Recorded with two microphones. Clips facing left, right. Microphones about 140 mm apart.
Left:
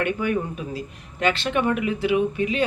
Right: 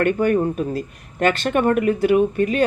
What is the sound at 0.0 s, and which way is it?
Speech, 50° right (ahead or behind).